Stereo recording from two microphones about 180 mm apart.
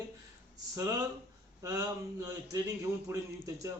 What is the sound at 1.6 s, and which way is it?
Speech, 15° right (ahead or behind).